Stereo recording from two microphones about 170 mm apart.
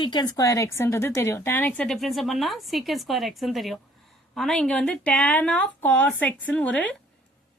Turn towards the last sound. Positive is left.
turn(degrees=5)  # may be behind; listen again after turning